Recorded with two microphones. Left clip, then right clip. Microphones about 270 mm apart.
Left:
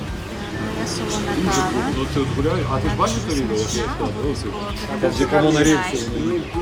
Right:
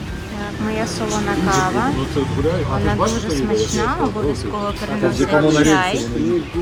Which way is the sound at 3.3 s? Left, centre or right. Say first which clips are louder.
Right 3 dB; left.